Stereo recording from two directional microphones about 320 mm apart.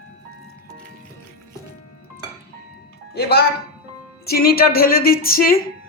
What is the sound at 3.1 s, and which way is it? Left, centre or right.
Music, left.